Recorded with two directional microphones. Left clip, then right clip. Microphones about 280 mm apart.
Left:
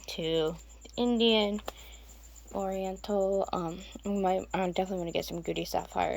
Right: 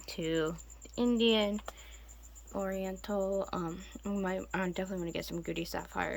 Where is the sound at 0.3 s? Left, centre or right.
Centre.